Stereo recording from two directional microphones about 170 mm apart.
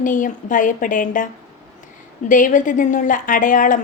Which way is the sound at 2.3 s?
50° left (ahead or behind).